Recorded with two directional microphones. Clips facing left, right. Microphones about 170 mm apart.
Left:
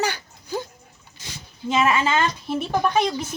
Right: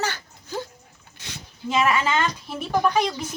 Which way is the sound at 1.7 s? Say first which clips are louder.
Left 1 dB; 25° left (ahead or behind).